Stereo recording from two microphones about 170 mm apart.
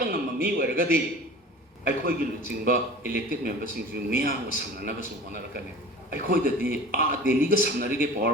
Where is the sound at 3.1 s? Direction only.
60° right (ahead or behind).